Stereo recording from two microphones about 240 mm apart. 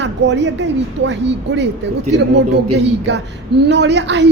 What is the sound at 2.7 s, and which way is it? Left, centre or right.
A woman's voice, right.